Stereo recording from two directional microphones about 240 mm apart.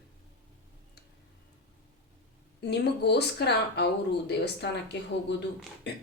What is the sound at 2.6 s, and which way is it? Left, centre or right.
A woman's voice, left.